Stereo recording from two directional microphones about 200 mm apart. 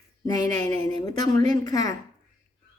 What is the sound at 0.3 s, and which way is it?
A woman's voice, 20° left (ahead or behind).